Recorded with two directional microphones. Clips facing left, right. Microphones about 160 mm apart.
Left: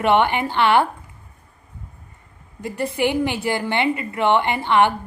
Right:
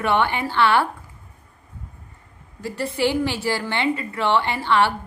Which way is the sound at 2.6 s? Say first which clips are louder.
Left 1 dB; 15° left (ahead or behind).